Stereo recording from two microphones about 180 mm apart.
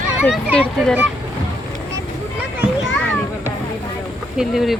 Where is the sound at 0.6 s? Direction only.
5° right (ahead or behind).